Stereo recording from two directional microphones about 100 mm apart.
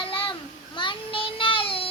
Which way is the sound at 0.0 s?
60° left (ahead or behind).